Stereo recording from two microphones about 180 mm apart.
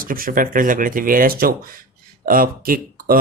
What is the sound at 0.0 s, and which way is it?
Speech, 50° right (ahead or behind).